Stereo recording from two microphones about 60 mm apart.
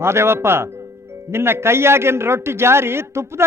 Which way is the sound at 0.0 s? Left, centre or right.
Right.